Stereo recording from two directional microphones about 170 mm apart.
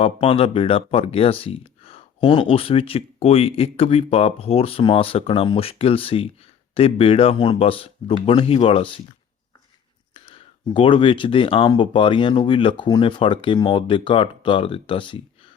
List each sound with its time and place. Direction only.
0.0 s speech: 35° left (ahead or behind)
10.2 s speech: 30° left (ahead or behind)